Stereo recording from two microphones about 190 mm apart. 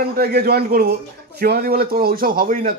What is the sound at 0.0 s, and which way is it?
A man's voice, 55° right (ahead or behind).